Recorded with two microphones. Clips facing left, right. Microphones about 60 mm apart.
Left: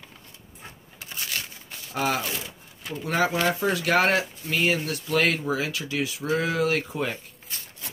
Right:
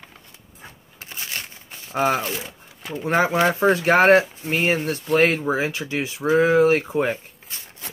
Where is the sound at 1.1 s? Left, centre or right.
Right.